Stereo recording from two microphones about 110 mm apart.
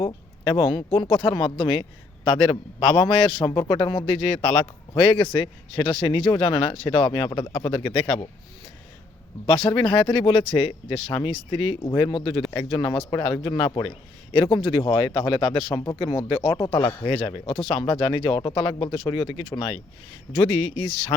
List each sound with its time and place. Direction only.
0.0 s speech: 50° left (ahead or behind)
9.5 s speech: 45° left (ahead or behind)
16.6 s speech: 50° left (ahead or behind)